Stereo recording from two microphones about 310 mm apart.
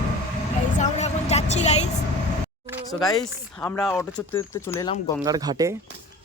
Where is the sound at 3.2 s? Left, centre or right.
Centre.